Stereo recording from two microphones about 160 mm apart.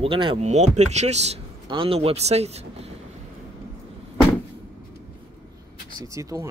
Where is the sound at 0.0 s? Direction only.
35° right (ahead or behind).